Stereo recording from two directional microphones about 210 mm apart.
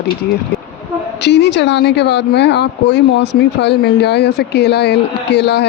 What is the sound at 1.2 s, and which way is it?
Speech, 55° left (ahead or behind).